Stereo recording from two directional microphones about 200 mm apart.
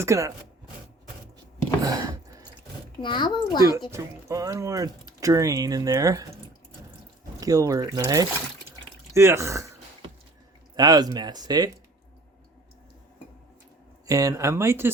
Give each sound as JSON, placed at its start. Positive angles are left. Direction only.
{"t": 0.0, "sound": "speech", "side_deg": -15}
{"t": 1.8, "sound": "a sound", "side_deg": -20}
{"t": 3.0, "sound": "a child's voice", "side_deg": 20}
{"t": 3.9, "sound": "speech", "side_deg": -15}
{"t": 7.3, "sound": "speech", "side_deg": -15}
{"t": 10.8, "sound": "speech", "side_deg": -20}
{"t": 14.1, "sound": "speech", "side_deg": -15}